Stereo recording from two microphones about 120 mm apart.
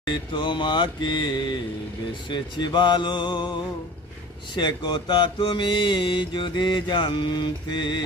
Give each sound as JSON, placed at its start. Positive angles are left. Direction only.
{"t": 0.1, "sound": "mantra", "side_deg": 40}
{"t": 4.5, "sound": "mantra", "side_deg": 40}